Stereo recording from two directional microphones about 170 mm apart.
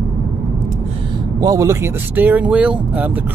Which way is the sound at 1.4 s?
20° right (ahead or behind).